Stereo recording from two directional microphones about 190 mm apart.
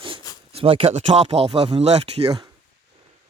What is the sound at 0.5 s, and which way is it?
Speech, 30° right (ahead or behind).